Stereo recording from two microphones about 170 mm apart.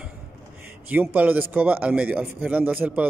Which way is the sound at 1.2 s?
10° right (ahead or behind).